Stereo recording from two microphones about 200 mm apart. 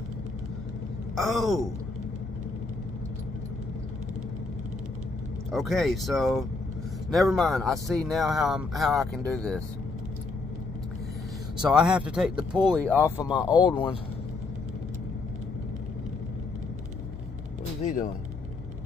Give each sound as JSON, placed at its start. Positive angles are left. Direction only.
{"t": 1.1, "sound": "speech", "side_deg": 0}
{"t": 5.5, "sound": "speech", "side_deg": 0}
{"t": 11.6, "sound": "speech", "side_deg": -5}
{"t": 13.5, "sound": "speech", "side_deg": 25}
{"t": 17.8, "sound": "speech", "side_deg": 40}